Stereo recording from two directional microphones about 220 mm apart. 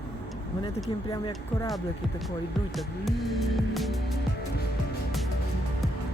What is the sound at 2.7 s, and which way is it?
Speech, centre (ahead or behind).